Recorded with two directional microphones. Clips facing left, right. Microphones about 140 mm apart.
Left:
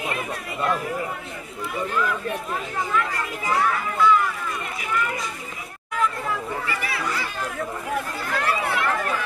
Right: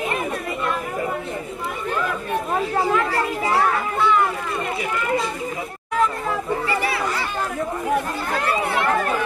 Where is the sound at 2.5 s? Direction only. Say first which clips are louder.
Right 7 dB; 35° right (ahead or behind).